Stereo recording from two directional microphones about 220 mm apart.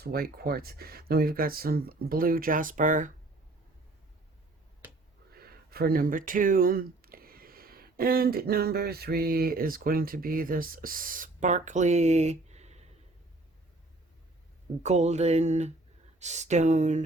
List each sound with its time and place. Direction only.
0.0 s speech: 45° right (ahead or behind)
5.3 s speech: 45° right (ahead or behind)
14.8 s a sound: 30° right (ahead or behind)